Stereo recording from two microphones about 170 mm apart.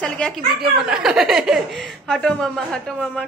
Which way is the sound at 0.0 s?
5° left (ahead or behind).